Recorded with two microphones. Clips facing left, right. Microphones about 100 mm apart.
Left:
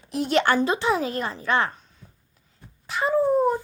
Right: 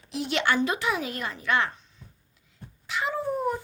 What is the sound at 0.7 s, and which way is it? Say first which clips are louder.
A woman's voice: left 5 dB; 30° left (ahead or behind).